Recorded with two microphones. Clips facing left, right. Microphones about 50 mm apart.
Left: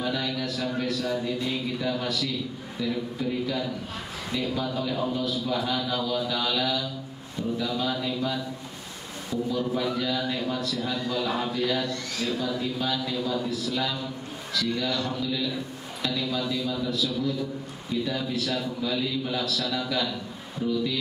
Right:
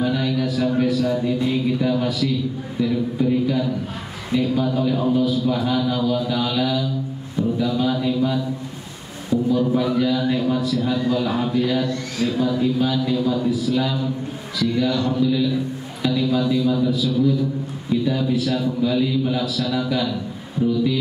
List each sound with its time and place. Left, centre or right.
0.0 s music: centre
2.8 s a man's voice: centre
9.3 s a sound: centre
9.8 s a man's voice: centre